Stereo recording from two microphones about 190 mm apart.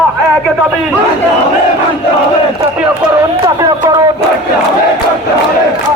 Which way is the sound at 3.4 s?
20° right (ahead or behind).